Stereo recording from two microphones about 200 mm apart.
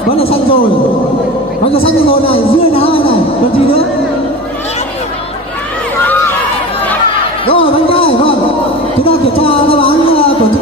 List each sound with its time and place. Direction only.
0.1 s a man's voice: 30° left (ahead or behind)
1.7 s a man's voice: 30° left (ahead or behind)
7.4 s a sound: 25° left (ahead or behind)
9.0 s a man's voice: 30° left (ahead or behind)